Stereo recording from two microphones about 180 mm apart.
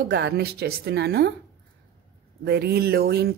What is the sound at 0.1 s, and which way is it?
Speech, 65° right (ahead or behind).